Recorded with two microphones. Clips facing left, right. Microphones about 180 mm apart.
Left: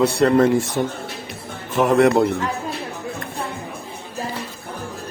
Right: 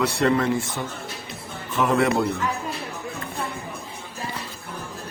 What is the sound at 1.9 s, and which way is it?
Speech, 45° left (ahead or behind).